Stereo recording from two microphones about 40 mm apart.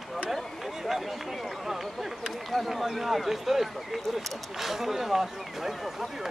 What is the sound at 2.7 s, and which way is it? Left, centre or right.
Speech, centre.